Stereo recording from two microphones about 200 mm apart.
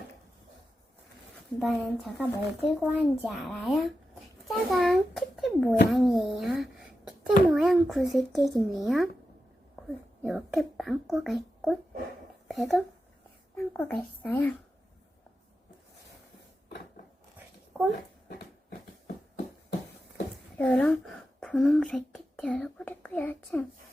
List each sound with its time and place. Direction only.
1.5 s a child's voice: centre (ahead or behind)
4.4 s a sound: centre (ahead or behind)
5.9 s a child's voice: centre (ahead or behind)
9.8 s a sound: 5° right (ahead or behind)
10.2 s a child's voice: centre (ahead or behind)
17.7 s speech: 5° right (ahead or behind)
20.6 s a child's voice: 5° left (ahead or behind)